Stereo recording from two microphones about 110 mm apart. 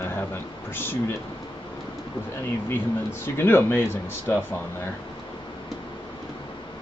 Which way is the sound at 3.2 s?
20° left (ahead or behind).